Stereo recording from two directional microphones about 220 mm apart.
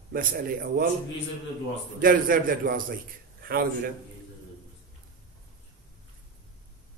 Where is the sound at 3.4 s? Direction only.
45° right (ahead or behind).